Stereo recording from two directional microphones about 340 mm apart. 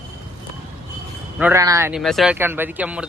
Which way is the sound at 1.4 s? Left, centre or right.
Centre.